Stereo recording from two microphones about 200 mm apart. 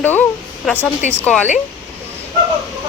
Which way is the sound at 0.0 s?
10° left (ahead or behind).